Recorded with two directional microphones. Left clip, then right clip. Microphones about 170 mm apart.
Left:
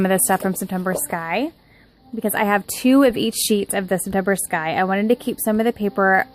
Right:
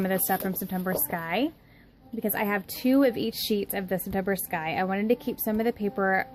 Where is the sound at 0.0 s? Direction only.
35° left (ahead or behind).